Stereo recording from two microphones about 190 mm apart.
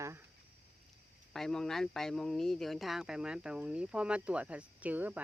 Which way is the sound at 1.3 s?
Centre (ahead or behind).